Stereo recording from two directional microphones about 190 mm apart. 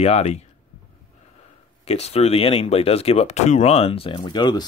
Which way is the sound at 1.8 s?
35° left (ahead or behind).